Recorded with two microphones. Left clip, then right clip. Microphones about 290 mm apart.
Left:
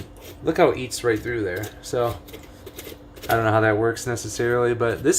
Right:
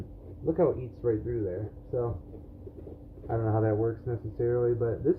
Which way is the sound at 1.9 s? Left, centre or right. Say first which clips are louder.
Left 8 dB; left.